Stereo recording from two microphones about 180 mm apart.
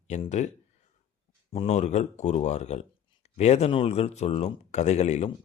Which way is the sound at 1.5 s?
35° left (ahead or behind).